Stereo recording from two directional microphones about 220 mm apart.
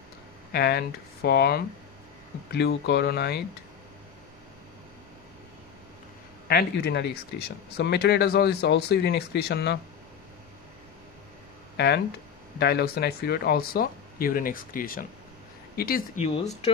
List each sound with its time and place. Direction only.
0.5 s speech: 45° left (ahead or behind)
6.4 s speech: 50° left (ahead or behind)
11.7 s a sound: 45° left (ahead or behind)
12.5 s speech: 45° left (ahead or behind)